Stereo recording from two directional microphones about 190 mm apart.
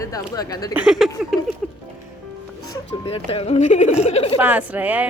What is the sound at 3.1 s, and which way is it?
Speech, 30° left (ahead or behind).